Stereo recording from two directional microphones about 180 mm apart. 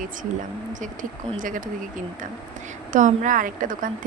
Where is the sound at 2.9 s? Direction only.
45° right (ahead or behind).